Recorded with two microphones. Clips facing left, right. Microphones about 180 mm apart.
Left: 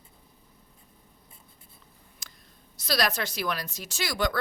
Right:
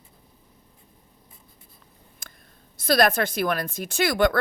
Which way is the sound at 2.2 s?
55° right (ahead or behind).